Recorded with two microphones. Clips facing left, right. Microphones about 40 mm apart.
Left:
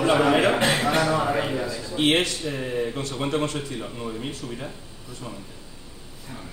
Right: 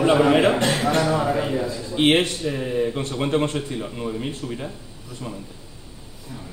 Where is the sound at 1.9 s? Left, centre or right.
Right.